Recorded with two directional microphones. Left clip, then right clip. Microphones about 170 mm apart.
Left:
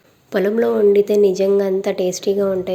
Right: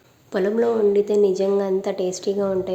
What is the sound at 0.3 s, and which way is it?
A woman's voice, 15° left (ahead or behind).